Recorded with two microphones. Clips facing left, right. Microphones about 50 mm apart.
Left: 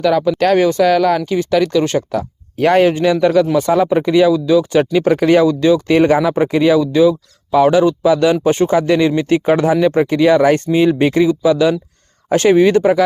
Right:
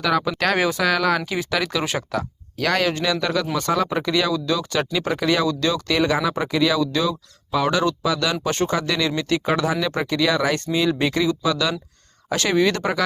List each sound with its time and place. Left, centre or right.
0.0 s speech: centre
2.6 s speech: left
6.0 s speech: left
12.3 s speech: left